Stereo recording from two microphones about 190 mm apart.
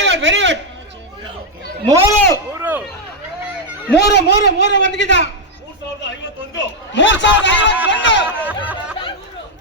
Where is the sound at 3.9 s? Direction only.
60° left (ahead or behind).